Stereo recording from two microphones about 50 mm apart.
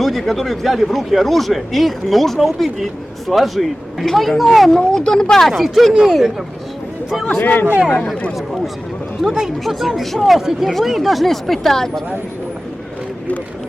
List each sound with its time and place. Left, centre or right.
0.0 s speech: centre
4.7 s speech: centre
5.5 s speech: centre
7.4 s speech: left
9.2 s speech: centre